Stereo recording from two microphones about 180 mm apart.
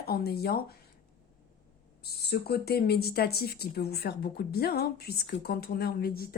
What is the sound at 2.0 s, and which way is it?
Speech, 60° left (ahead or behind).